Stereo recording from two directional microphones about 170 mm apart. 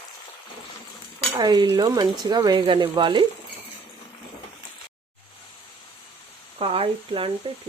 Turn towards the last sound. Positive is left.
turn(degrees=-30)  # may be behind; listen again after turning